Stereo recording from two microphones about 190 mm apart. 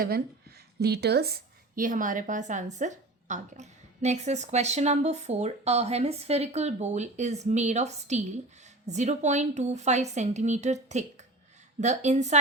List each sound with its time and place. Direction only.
0.0 s a woman's voice: 55° right (ahead or behind); by 12.4 s 35° right (ahead or behind)